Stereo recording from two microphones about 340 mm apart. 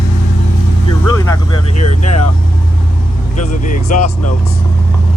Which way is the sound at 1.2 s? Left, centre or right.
Centre.